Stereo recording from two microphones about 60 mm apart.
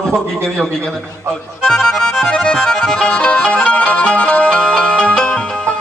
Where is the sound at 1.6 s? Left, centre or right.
Centre.